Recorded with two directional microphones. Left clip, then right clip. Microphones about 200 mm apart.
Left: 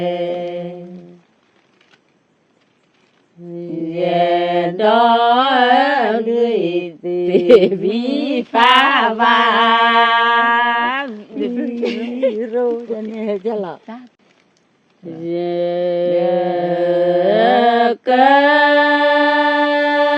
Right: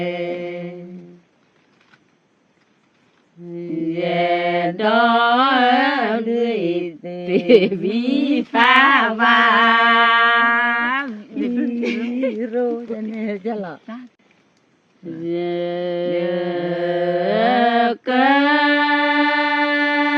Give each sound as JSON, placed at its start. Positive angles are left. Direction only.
{"t": 0.0, "sound": "mantra", "side_deg": 20}
{"t": 3.6, "sound": "mantra", "side_deg": 15}
{"t": 7.3, "sound": "a sound", "side_deg": 15}
{"t": 15.2, "sound": "mantra", "side_deg": 15}